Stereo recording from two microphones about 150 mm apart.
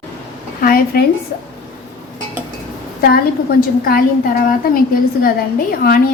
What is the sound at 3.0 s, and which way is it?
A woman's voice, 85° left.